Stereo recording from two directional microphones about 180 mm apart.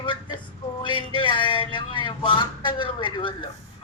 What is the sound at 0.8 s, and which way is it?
Speech, 25° left (ahead or behind).